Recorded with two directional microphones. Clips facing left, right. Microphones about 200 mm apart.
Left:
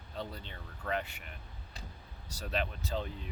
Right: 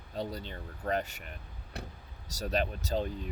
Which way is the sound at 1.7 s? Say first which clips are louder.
Right 8 dB; 65° right (ahead or behind).